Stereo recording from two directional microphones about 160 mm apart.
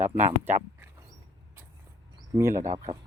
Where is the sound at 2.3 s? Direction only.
20° right (ahead or behind).